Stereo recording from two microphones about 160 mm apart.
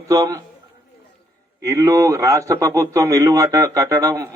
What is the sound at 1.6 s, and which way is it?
A man's voice, 20° right (ahead or behind).